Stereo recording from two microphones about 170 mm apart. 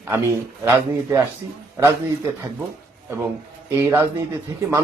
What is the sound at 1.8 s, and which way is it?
Speech, 15° right (ahead or behind).